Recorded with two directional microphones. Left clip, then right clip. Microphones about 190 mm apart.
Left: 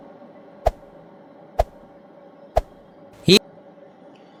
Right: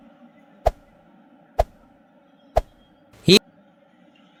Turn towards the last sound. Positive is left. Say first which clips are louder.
# even
turn(degrees=0)  # may be behind; listen again after turning